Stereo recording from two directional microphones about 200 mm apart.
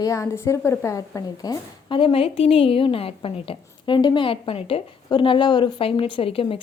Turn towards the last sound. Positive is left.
turn(degrees=30)  # may be behind; listen again after turning